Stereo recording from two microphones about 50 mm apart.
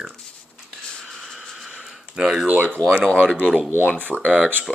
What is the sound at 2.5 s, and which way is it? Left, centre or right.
Speech, right.